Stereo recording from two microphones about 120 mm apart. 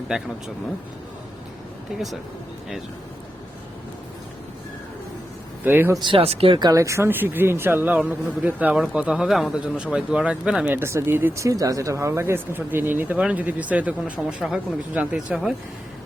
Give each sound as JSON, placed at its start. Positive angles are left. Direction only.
{"t": 0.1, "sound": "speech", "side_deg": -5}
{"t": 1.9, "sound": "speech", "side_deg": -5}
{"t": 5.6, "sound": "speech", "side_deg": -15}
{"t": 6.0, "sound": "speech", "side_deg": -45}
{"t": 6.7, "sound": "speech", "side_deg": -25}
{"t": 10.8, "sound": "speech", "side_deg": -20}